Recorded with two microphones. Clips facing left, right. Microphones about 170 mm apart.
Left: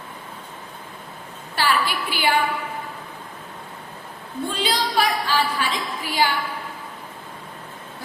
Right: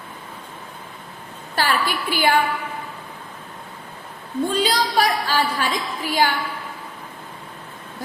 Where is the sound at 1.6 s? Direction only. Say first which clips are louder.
Even; 45° right (ahead or behind).